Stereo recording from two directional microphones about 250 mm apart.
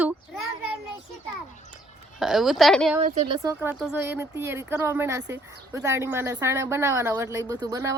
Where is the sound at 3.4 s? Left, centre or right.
Centre.